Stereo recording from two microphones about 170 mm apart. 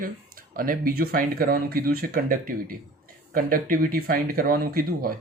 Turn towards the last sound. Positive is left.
turn(degrees=-60)  # may be behind; listen again after turning